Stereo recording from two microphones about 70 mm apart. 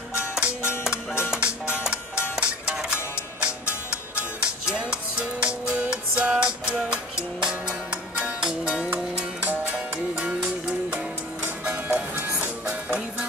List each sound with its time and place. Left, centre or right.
0.1 s music: centre
9.4 s music: right
10.1 s music: centre